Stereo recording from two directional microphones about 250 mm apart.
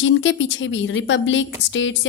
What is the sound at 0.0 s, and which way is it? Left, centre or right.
A woman's voice, left.